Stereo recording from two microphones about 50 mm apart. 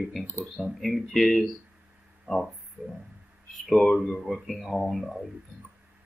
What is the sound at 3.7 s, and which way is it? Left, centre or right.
Speech, centre.